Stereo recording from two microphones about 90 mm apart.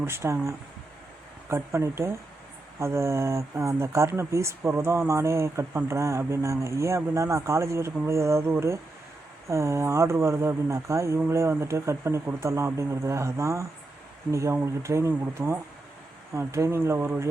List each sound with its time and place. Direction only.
0.0 s speech: 30° right (ahead or behind)
1.5 s speech: 30° right (ahead or behind)